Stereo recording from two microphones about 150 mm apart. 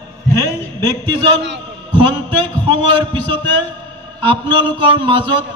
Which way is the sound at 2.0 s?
30° right (ahead or behind).